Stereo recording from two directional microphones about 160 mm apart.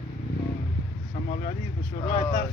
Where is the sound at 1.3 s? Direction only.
45° left (ahead or behind).